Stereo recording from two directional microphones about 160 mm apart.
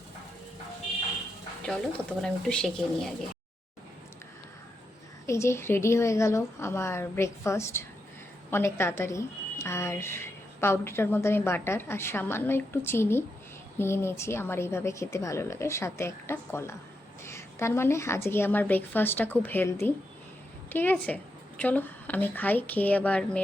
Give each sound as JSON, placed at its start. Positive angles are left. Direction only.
{"t": 2.2, "sound": "speech", "side_deg": 5}
{"t": 5.2, "sound": "speech", "side_deg": 15}